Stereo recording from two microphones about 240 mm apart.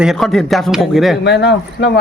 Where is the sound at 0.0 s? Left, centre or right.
Centre.